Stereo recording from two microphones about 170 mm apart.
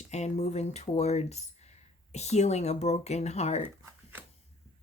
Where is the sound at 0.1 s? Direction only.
40° left (ahead or behind).